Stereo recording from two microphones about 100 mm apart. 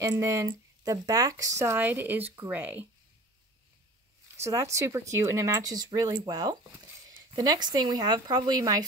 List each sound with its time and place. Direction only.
0.0 s speech: 35° right (ahead or behind); by 2.9 s 20° right (ahead or behind)
4.4 s speech: 30° right (ahead or behind)